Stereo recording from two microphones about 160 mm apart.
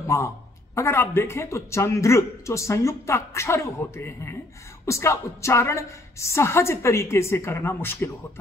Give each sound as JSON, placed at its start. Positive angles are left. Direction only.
{"t": 0.0, "sound": "a man's voice", "side_deg": 20}